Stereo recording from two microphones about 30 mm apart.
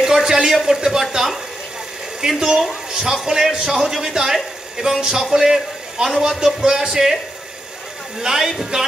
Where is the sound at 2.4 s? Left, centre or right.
Centre.